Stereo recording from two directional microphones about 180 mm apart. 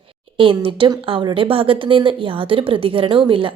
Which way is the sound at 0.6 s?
30° right (ahead or behind).